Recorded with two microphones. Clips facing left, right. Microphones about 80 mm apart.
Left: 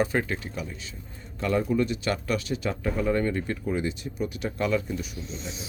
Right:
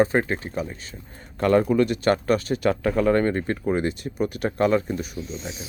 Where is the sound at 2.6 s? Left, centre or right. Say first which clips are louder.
Right 7 dB; right.